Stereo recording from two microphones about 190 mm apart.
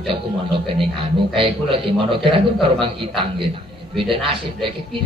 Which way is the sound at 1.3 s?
30° right (ahead or behind).